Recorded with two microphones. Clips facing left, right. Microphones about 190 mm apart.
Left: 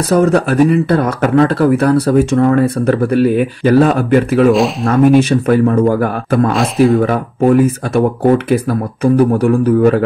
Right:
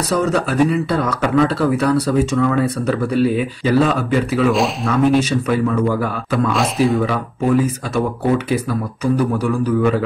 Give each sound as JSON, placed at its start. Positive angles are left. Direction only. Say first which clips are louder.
{"t": 0.1, "sound": "speech", "louder": "left 7 dB", "side_deg": 55}